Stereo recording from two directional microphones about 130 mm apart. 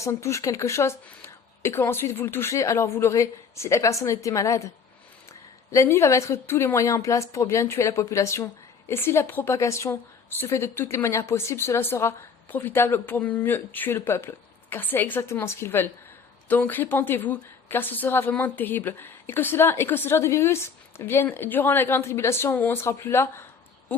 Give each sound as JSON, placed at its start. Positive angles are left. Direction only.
{"t": 0.0, "sound": "speech", "side_deg": 20}
{"t": 5.7, "sound": "a woman's voice", "side_deg": 20}